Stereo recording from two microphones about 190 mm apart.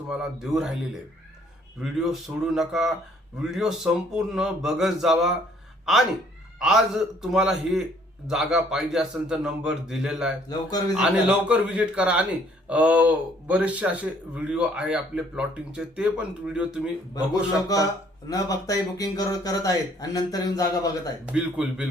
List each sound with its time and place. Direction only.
0.1 s speech: centre (ahead or behind)
1.8 s a man's voice: centre (ahead or behind)
18.3 s speech: 20° left (ahead or behind)
21.2 s speech: 5° right (ahead or behind)